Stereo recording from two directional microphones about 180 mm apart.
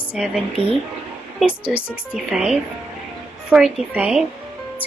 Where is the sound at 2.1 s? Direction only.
5° right (ahead or behind).